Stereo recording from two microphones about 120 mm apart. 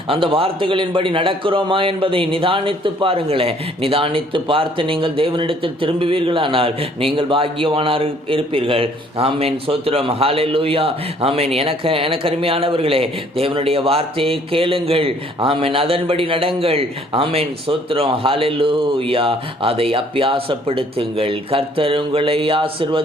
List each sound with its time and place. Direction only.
0.1 s a man's voice: 50° right (ahead or behind)